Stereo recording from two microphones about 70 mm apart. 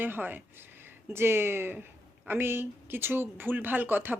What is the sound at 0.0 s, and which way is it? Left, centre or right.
A woman's voice, right.